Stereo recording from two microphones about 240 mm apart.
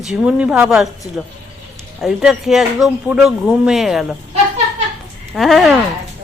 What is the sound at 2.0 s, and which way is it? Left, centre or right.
Speech, centre.